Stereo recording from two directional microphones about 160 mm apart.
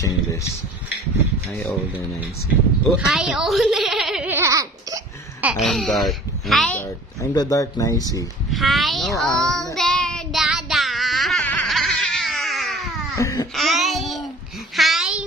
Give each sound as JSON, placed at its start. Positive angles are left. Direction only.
{"t": 0.0, "sound": "speech", "side_deg": 20}
{"t": 3.0, "sound": "a child's voice", "side_deg": -5}
{"t": 5.4, "sound": "speech", "side_deg": -5}
{"t": 7.2, "sound": "speech", "side_deg": 20}
{"t": 8.5, "sound": "a child's voice", "side_deg": 0}
{"t": 9.8, "sound": "child singing", "side_deg": 5}
{"t": 13.1, "sound": "baby cry", "side_deg": 20}
{"t": 13.6, "sound": "child singing", "side_deg": 0}
{"t": 14.8, "sound": "a sound", "side_deg": 0}